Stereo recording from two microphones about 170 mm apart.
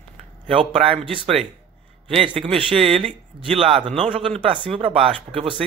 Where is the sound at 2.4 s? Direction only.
35° right (ahead or behind).